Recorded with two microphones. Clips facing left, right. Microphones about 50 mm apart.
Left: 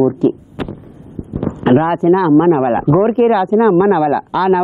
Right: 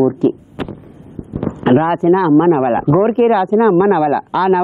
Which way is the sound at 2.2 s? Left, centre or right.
Centre.